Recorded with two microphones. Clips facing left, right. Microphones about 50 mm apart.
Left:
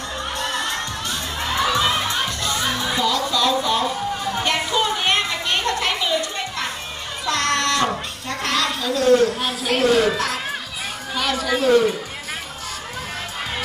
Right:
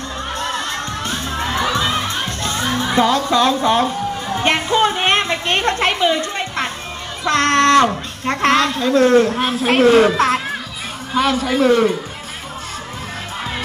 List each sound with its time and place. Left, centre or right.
0.4 s crowd: right
2.0 s music: right
7.2 s a man's voice: right